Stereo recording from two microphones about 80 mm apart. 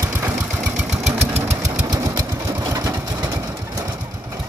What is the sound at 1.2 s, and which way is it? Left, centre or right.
Engine, right.